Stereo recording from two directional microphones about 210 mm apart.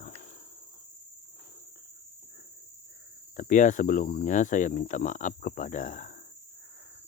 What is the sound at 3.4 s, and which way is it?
Speech, 35° left (ahead or behind).